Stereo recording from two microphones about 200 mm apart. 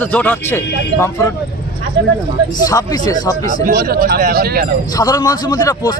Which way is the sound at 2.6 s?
15° left (ahead or behind).